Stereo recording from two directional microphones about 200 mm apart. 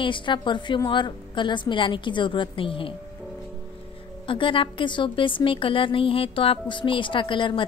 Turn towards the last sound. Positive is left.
turn(degrees=25)  # may be behind; listen again after turning